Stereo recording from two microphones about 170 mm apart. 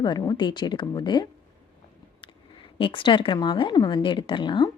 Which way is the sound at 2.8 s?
30° left (ahead or behind).